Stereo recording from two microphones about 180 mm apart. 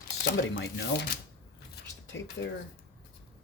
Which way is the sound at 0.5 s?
75° left (ahead or behind).